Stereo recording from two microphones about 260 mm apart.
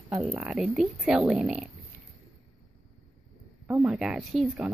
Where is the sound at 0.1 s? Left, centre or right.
Centre.